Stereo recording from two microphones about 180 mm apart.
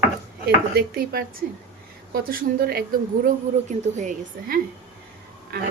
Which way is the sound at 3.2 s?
40° right (ahead or behind).